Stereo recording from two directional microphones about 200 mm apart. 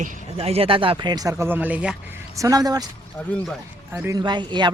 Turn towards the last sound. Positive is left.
turn(degrees=-25)  # may be behind; listen again after turning